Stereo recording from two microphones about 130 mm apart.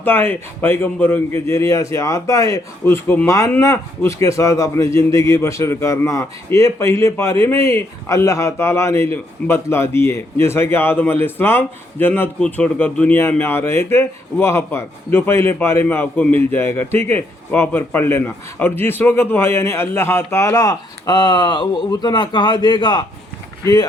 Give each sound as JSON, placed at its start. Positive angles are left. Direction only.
{"t": 0.0, "sound": "a man's voice", "side_deg": 15}